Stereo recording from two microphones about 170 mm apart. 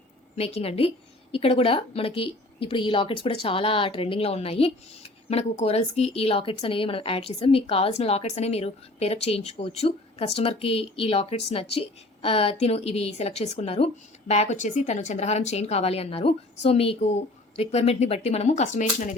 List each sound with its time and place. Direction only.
0.3 s a woman's voice: 40° left (ahead or behind)